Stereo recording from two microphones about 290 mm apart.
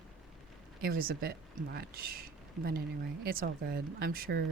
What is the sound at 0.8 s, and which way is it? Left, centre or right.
Speech, right.